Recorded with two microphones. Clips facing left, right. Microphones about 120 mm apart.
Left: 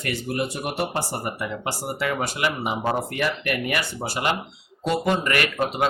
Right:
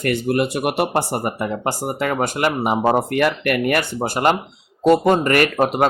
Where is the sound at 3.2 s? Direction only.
55° right (ahead or behind).